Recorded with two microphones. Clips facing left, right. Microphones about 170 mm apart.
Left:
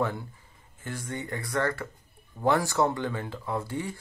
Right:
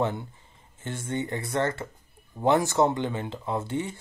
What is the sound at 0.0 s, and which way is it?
Speech, 20° right (ahead or behind).